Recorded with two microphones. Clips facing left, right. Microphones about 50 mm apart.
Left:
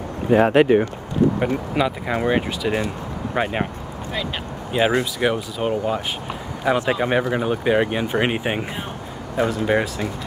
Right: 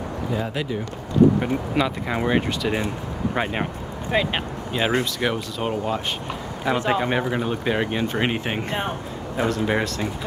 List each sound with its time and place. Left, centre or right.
0.3 s speech: left
1.8 s speech: centre
4.1 s speech: right
4.7 s speech: centre